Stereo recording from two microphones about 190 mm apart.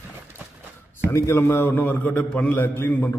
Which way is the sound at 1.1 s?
15° left (ahead or behind).